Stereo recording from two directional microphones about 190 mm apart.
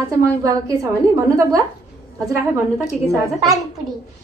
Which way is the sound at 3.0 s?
Centre (ahead or behind).